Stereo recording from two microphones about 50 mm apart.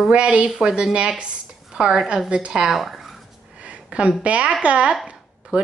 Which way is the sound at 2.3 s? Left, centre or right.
Right.